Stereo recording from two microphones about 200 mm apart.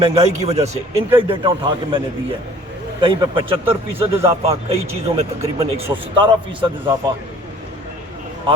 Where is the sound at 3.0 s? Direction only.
25° right (ahead or behind).